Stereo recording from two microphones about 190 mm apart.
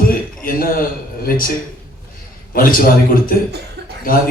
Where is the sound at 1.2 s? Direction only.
50° left (ahead or behind).